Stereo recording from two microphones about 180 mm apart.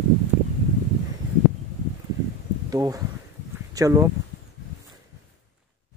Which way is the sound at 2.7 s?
20° right (ahead or behind).